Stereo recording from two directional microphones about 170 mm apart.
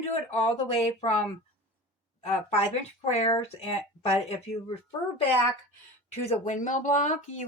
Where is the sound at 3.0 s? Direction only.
40° left (ahead or behind).